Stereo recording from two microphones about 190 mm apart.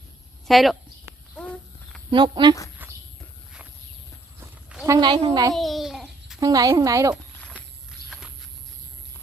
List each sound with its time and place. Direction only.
0.4 s speech: centre (ahead or behind)
1.4 s a sound: 5° left (ahead or behind)
2.0 s a woman's voice: 25° right (ahead or behind)
2.8 s walk: 10° right (ahead or behind)
4.4 s a sound: 5° right (ahead or behind)
4.9 s a woman's voice: 20° right (ahead or behind)
5.5 s babbling: centre (ahead or behind)
6.4 s speech: 20° right (ahead or behind)
7.9 s walk: 5° right (ahead or behind)